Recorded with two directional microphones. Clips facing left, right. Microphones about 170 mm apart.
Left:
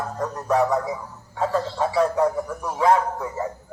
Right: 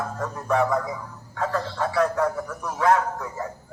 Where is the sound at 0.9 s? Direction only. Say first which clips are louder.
Left 2 dB; 25° left (ahead or behind).